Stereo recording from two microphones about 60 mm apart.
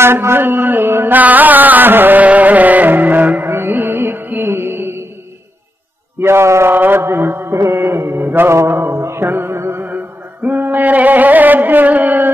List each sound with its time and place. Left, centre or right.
0.0 s mantra: right
3.4 s music: right
6.2 s a sound: right
6.7 s mantra: right
7.5 s music: right
8.5 s mantra: right
9.8 s music: right